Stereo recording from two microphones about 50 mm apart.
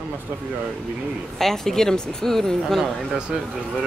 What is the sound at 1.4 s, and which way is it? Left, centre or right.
Speech, centre.